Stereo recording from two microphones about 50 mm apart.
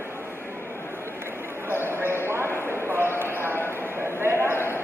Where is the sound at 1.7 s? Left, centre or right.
Right.